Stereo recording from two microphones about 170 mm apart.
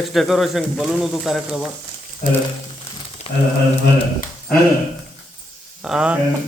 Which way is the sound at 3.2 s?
40° left (ahead or behind).